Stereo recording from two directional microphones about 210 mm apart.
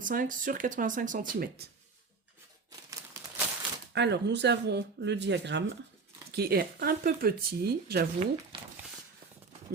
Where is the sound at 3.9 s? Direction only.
55° right (ahead or behind).